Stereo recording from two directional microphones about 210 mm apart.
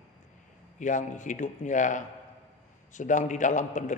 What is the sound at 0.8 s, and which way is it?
A man's voice, 35° left (ahead or behind).